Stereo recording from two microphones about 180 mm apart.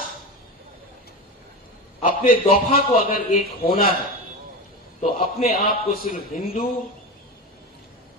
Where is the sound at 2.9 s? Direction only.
55° left (ahead or behind).